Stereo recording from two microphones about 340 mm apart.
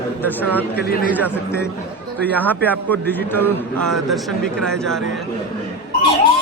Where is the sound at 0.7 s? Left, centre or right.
Left.